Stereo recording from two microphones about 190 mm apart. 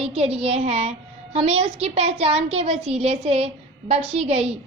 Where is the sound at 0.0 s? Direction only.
30° right (ahead or behind).